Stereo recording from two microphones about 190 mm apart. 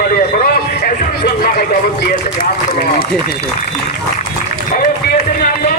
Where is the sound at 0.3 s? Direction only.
55° left (ahead or behind).